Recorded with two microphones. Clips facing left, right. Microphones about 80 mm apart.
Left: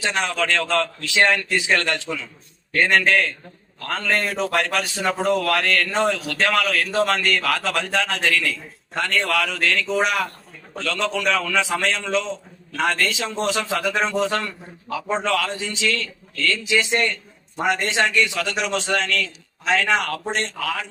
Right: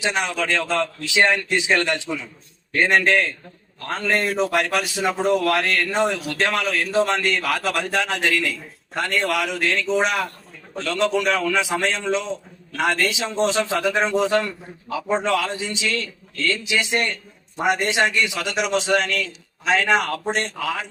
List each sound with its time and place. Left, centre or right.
0.0 s a man's voice: centre